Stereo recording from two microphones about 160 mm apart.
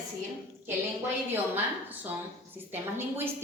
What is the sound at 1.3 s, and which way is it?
A woman's voice, 10° right (ahead or behind).